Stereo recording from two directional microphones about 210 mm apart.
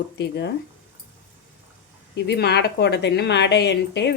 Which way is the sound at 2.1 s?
50° left (ahead or behind).